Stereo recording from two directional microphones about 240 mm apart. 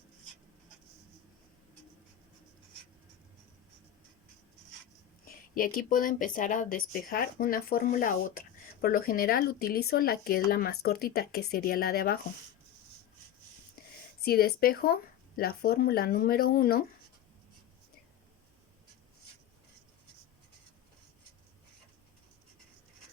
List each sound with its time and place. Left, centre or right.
5.2 s speech: left
13.8 s a sound: left
14.3 s speech: left